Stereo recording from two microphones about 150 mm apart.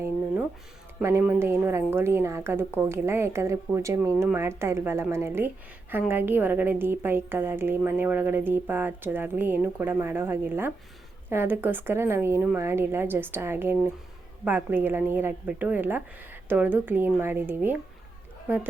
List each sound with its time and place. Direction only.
1.2 s a woman's voice: 15° right (ahead or behind)